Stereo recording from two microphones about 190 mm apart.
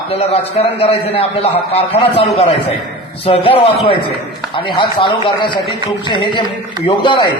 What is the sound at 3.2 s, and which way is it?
A man's voice, 30° left (ahead or behind).